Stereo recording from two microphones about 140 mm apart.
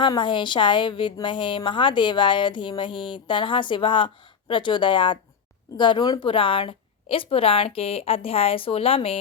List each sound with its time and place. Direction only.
0.0 s a woman's voice: 35° left (ahead or behind)